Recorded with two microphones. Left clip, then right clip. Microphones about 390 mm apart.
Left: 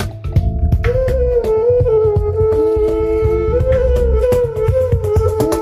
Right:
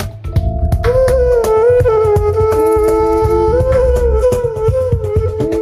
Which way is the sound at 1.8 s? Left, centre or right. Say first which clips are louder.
Right 2 dB; right.